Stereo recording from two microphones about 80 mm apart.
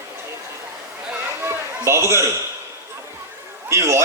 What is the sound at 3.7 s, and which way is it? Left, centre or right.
Speech, right.